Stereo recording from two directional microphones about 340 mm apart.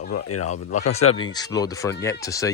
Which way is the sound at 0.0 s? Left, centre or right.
Left.